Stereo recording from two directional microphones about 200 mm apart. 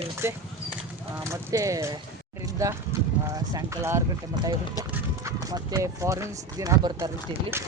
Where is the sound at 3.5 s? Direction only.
15° right (ahead or behind).